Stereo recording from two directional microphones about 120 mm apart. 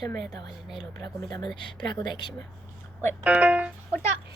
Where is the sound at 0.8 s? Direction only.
35° left (ahead or behind).